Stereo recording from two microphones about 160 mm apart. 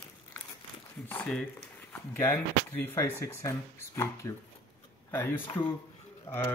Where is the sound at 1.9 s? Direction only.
15° left (ahead or behind).